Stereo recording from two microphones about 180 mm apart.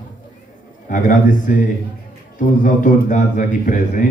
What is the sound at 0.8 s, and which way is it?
A man's voice, 45° left (ahead or behind).